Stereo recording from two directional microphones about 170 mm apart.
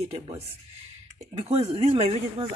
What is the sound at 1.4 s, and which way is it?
Speech, 40° right (ahead or behind).